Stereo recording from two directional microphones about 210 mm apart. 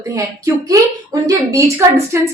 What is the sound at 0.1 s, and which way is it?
A woman's voice, 15° right (ahead or behind).